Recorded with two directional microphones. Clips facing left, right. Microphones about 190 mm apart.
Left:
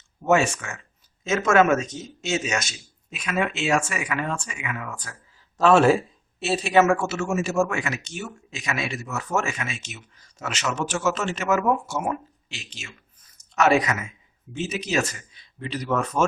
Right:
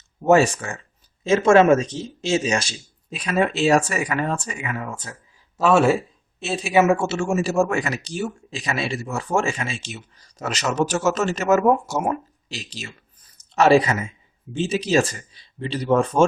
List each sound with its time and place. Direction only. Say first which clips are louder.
0.2 s speech: right 5 dB; 35° right (ahead or behind)
5.5 s speech: even; 5° right (ahead or behind)
6.7 s speech: right 2 dB; 20° right (ahead or behind)